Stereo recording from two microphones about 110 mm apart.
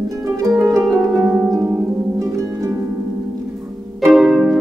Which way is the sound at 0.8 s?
Centre (ahead or behind).